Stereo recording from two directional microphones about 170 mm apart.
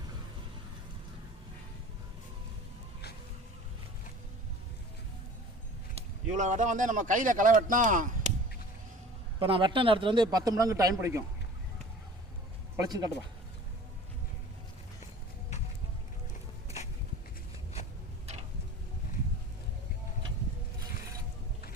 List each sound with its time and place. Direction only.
5.9 s speech: 40° right (ahead or behind)
9.4 s speech: 30° right (ahead or behind)
12.7 s speech: 20° right (ahead or behind)
16.6 s a sound: 40° left (ahead or behind)